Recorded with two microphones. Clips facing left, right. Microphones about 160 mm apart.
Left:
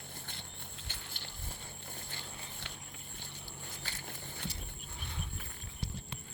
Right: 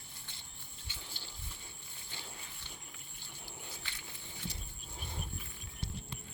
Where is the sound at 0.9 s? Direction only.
60° left (ahead or behind).